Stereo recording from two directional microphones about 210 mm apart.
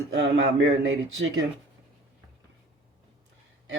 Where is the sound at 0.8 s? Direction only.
65° right (ahead or behind).